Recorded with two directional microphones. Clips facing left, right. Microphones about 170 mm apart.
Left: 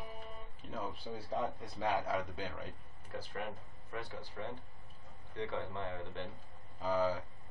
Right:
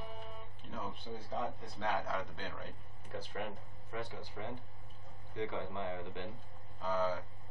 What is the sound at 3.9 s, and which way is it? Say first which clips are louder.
Speech: right 1 dB; 15° right (ahead or behind).